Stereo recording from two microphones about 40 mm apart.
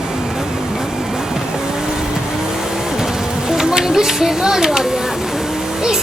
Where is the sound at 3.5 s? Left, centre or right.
Centre.